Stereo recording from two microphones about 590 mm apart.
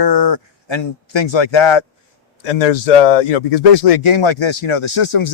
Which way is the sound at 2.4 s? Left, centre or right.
Left.